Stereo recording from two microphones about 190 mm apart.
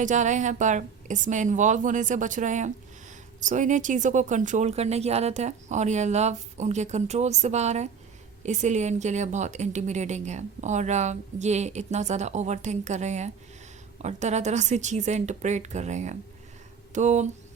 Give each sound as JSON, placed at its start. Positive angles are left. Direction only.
{"t": 0.0, "sound": "a woman's voice", "side_deg": -40}